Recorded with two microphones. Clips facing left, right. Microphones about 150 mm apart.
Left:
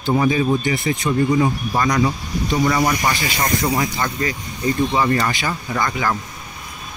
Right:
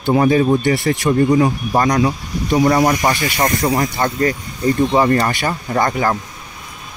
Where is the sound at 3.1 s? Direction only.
55° right (ahead or behind).